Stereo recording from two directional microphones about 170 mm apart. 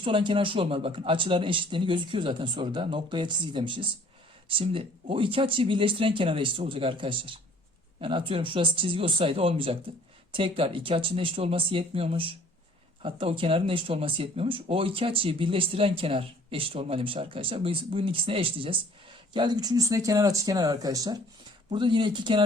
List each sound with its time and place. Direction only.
0.0 s speech: 30° right (ahead or behind)